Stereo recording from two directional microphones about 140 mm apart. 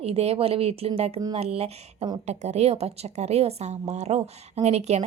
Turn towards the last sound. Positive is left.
turn(degrees=-50)  # may be behind; listen again after turning